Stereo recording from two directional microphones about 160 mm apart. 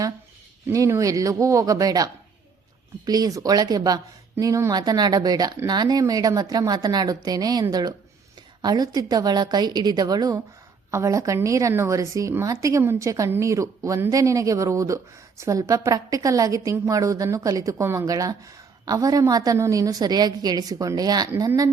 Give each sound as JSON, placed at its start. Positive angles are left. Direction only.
{"t": 0.7, "sound": "a woman's voice", "side_deg": -20}
{"t": 3.1, "sound": "a woman's voice", "side_deg": -25}